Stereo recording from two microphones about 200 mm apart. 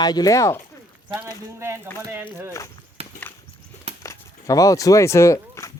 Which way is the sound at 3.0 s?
30° right (ahead or behind).